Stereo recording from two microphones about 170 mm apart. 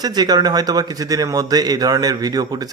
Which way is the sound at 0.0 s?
25° right (ahead or behind).